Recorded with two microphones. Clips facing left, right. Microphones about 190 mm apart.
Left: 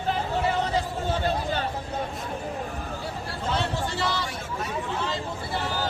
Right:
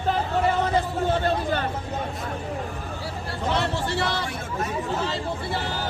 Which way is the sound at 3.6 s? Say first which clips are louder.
Right 2 dB; 65° right (ahead or behind).